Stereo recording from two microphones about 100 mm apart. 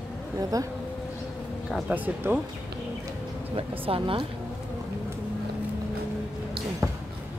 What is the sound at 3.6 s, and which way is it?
Speech, 65° right (ahead or behind).